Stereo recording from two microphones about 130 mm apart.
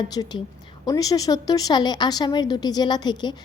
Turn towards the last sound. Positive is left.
turn(degrees=35)  # may be behind; listen again after turning